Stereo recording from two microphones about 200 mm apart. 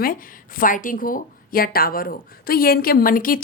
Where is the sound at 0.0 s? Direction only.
45° left (ahead or behind).